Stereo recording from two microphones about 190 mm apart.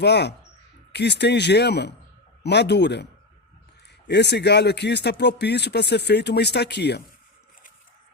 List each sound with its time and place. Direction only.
0.0 s speech: 65° left (ahead or behind)